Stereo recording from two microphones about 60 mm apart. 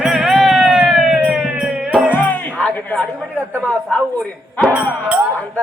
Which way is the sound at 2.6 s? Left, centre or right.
Left.